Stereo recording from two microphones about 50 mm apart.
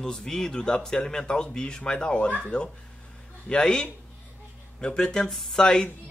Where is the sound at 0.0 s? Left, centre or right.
Centre.